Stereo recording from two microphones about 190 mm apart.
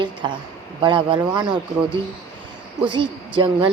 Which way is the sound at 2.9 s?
25° right (ahead or behind).